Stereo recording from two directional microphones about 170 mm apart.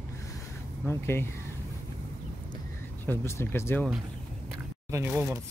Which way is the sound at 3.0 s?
15° left (ahead or behind).